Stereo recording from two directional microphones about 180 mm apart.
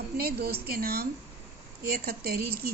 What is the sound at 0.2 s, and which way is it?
Speech, 60° right (ahead or behind).